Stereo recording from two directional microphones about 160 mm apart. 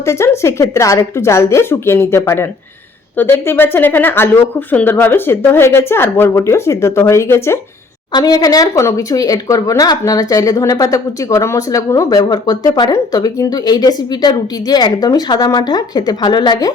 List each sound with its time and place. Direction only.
0.0 s speech: 15° left (ahead or behind)